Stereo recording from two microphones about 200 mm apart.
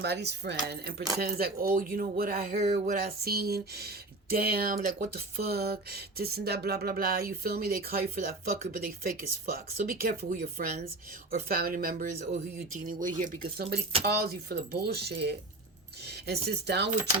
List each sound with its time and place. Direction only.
0.0 s speech: 55° right (ahead or behind)